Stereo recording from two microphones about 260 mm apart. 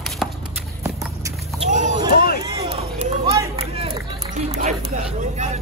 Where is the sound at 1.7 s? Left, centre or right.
Right.